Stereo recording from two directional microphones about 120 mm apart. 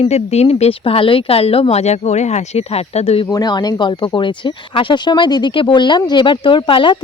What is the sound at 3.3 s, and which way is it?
Speech, 35° left (ahead or behind).